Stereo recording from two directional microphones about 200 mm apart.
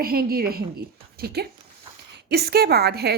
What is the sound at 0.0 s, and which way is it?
A woman's voice, 50° right (ahead or behind).